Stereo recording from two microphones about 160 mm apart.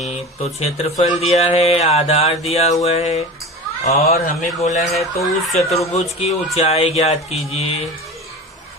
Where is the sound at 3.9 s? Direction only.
75° left (ahead or behind).